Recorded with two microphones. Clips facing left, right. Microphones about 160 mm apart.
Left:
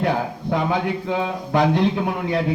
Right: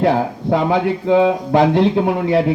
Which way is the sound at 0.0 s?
30° right (ahead or behind).